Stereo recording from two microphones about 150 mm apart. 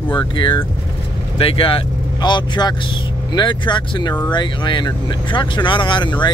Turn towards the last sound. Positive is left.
turn(degrees=30)  # may be behind; listen again after turning